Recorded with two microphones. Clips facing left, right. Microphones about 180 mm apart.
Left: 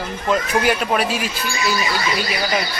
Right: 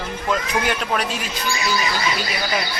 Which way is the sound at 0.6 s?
5° left (ahead or behind).